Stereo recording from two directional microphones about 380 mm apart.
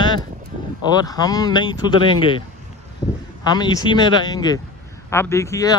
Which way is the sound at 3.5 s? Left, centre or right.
Centre.